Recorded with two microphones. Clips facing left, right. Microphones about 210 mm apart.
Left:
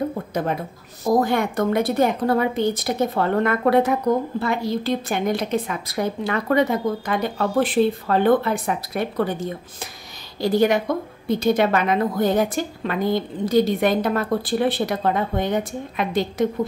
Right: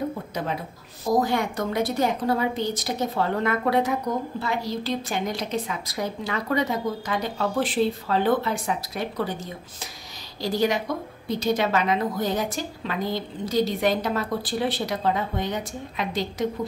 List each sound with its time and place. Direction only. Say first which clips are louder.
1.0 s a woman's voice: left 3 dB; 55° left (ahead or behind)